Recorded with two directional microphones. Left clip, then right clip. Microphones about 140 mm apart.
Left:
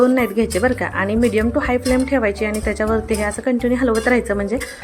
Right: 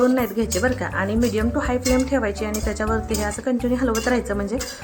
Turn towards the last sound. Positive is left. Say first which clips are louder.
# left 5 dB
turn(degrees=15)  # may be behind; listen again after turning